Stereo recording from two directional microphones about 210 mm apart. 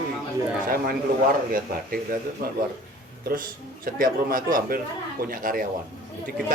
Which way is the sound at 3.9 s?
45° right (ahead or behind).